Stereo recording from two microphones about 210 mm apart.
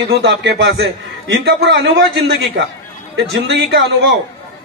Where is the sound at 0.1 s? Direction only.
50° right (ahead or behind).